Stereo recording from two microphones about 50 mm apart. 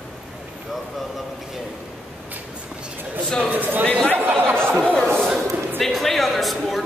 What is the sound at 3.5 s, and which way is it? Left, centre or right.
Speech, right.